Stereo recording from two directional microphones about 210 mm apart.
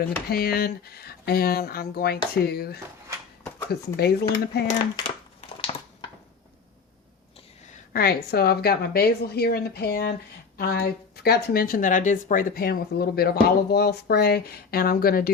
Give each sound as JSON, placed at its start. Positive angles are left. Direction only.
{"t": 0.3, "sound": "speech", "side_deg": 50}
{"t": 4.7, "sound": "speech", "side_deg": 25}
{"t": 7.7, "sound": "speech", "side_deg": 45}